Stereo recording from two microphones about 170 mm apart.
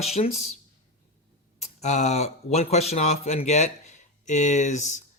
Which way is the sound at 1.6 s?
40° left (ahead or behind).